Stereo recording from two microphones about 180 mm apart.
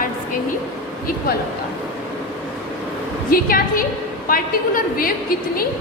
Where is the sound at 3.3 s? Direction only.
55° left (ahead or behind).